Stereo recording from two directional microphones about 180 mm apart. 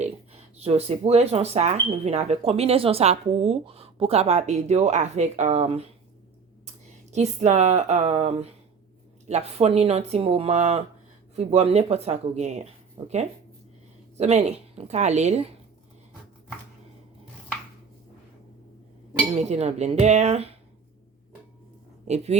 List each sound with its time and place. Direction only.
0.6 s speech: 35° right (ahead or behind)
7.1 s speech: 40° right (ahead or behind)
19.3 s speech: 35° right (ahead or behind)
22.0 s speech: 35° right (ahead or behind)